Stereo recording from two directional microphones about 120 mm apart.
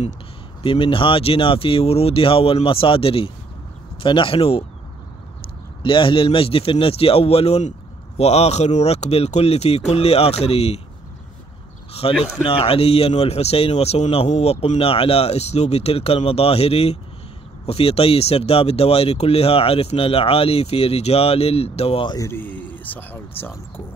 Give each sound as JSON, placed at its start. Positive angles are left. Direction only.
{"t": 0.6, "sound": "speech", "side_deg": 45}
{"t": 5.8, "sound": "speech", "side_deg": 45}
{"t": 11.9, "sound": "speech", "side_deg": 55}
{"t": 22.1, "sound": "speech", "side_deg": 25}